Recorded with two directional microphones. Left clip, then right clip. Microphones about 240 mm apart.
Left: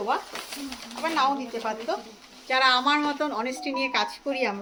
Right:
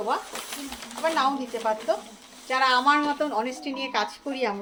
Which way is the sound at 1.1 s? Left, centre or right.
Centre.